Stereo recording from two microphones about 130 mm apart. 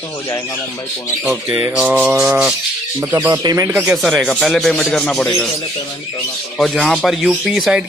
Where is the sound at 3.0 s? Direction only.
25° right (ahead or behind).